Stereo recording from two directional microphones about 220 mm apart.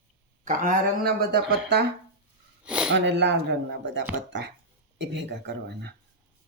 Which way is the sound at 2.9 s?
55° right (ahead or behind).